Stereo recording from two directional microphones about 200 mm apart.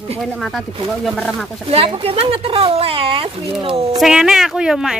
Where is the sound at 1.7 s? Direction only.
30° right (ahead or behind).